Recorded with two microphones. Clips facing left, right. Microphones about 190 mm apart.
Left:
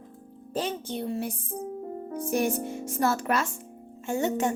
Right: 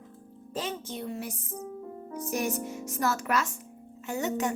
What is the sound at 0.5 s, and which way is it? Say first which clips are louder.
A woman's voice: left 4 dB; 30° left (ahead or behind).